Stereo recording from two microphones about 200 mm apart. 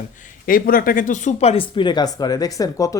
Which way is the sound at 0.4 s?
45° left (ahead or behind).